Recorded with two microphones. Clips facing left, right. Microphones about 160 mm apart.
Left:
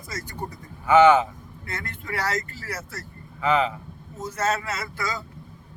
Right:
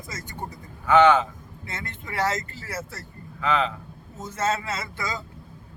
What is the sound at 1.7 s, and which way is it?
Speech, 25° right (ahead or behind).